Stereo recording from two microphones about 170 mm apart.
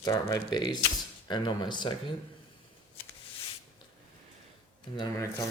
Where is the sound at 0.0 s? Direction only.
20° left (ahead or behind).